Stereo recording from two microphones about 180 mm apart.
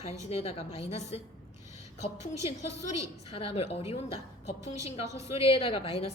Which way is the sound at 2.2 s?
35° left (ahead or behind).